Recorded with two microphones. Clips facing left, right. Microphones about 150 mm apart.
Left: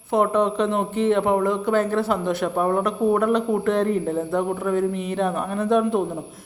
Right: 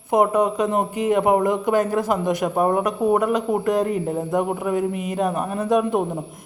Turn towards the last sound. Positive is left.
turn(degrees=-10)  # may be behind; listen again after turning